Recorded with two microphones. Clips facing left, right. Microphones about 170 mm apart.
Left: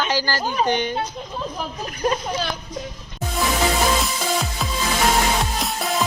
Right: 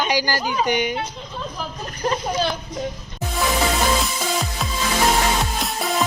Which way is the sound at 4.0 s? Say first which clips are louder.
Left 1 dB; centre (ahead or behind).